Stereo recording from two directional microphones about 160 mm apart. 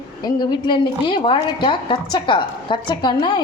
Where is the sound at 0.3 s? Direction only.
30° left (ahead or behind).